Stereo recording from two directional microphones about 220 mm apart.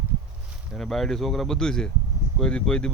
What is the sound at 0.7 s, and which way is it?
Speech, centre (ahead or behind).